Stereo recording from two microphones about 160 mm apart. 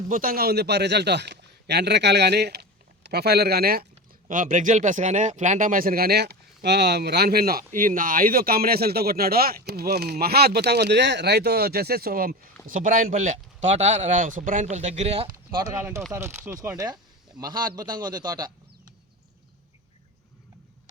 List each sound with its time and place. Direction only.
0.1 s a man's voice: 65° right (ahead or behind)
4.3 s speech: 55° right (ahead or behind); by 9.6 s 70° right (ahead or behind)
9.6 s speech: 85° right; by 12.4 s 70° right (ahead or behind)
12.6 s speech: 55° right (ahead or behind); by 15.3 s 40° right (ahead or behind)
15.6 s a man's voice: 15° right (ahead or behind)